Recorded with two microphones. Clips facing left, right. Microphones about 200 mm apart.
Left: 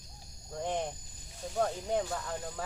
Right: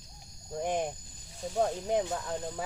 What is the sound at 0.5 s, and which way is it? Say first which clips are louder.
Speech: right 3 dB; 15° right (ahead or behind).